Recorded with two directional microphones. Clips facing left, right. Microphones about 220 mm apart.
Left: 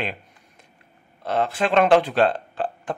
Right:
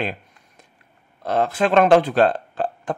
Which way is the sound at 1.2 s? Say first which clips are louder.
Right 3 dB; 45° right (ahead or behind).